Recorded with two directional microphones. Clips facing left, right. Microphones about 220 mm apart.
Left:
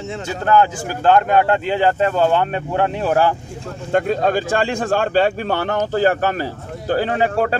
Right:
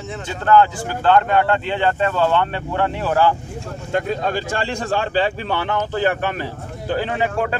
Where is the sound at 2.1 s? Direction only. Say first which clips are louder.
Left 2 dB; 35° left (ahead or behind).